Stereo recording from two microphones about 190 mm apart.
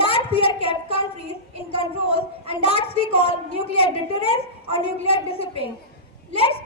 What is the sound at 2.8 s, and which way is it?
A woman's voice, 30° left (ahead or behind).